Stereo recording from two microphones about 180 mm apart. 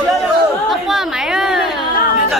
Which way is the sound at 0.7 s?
Centre (ahead or behind).